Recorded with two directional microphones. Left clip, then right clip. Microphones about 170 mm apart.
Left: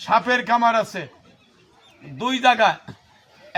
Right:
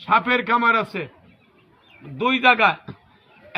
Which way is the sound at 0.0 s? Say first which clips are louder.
Even; 20° left (ahead or behind).